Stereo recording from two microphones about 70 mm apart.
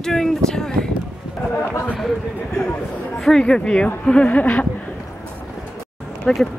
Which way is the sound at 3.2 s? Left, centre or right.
Centre.